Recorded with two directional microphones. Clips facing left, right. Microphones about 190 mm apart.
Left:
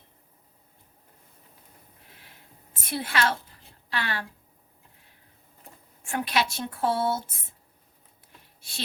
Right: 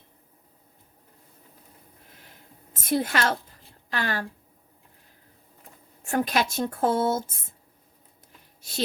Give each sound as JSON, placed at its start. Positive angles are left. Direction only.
{"t": 2.8, "sound": "a woman's voice", "side_deg": -45}
{"t": 6.1, "sound": "a woman's voice", "side_deg": -45}